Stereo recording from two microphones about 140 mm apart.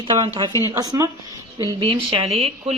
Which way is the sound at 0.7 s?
20° right (ahead or behind).